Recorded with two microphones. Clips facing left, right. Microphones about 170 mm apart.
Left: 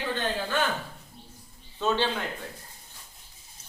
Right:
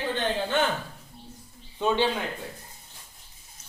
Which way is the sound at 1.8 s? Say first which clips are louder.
Right 2 dB; 15° right (ahead or behind).